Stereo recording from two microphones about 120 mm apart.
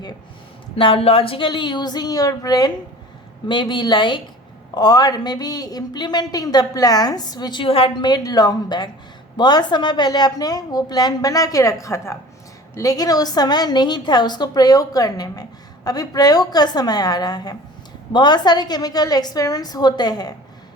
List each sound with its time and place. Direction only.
0.8 s a woman's voice: 50° left (ahead or behind)
8.1 s a woman's voice: 35° left (ahead or behind)